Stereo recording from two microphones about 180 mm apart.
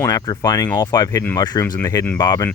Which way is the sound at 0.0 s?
20° left (ahead or behind).